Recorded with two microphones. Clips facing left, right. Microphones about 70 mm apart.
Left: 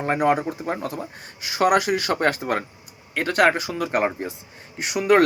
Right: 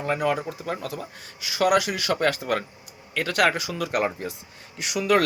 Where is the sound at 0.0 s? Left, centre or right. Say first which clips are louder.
Left 4 dB; left.